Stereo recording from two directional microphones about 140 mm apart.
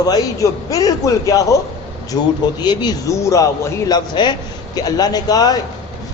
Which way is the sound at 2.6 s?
30° left (ahead or behind).